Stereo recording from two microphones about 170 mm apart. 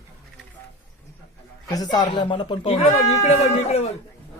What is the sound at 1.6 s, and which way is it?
Speech, 20° left (ahead or behind).